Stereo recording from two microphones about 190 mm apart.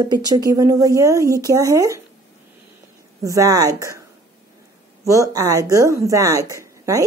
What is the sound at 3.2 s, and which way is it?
Speech, 15° right (ahead or behind).